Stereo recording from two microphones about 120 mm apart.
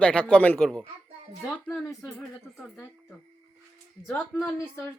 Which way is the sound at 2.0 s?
5° left (ahead or behind).